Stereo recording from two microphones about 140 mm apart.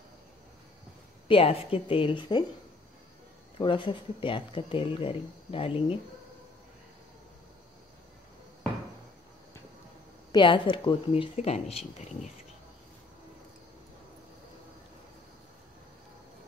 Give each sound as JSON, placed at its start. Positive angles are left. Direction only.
{"t": 1.2, "sound": "speech", "side_deg": 40}
{"t": 3.5, "sound": "speech", "side_deg": 35}
{"t": 10.3, "sound": "speech", "side_deg": 35}